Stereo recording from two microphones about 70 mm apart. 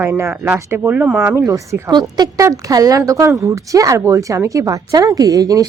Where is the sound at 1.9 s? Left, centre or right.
Right.